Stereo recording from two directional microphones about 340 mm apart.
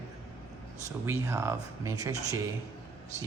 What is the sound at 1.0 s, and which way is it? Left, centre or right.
Speech, centre.